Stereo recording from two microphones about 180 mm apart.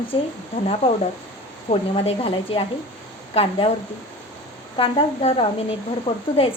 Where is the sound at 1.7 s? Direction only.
35° left (ahead or behind).